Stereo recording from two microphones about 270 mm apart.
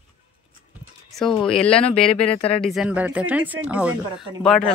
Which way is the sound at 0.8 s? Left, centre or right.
Centre.